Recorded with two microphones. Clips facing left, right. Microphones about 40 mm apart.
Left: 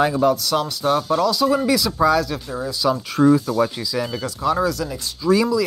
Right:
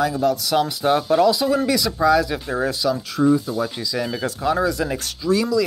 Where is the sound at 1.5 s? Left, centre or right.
Centre.